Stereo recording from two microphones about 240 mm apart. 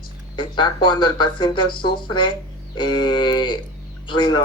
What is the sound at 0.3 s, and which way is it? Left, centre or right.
Speech, centre.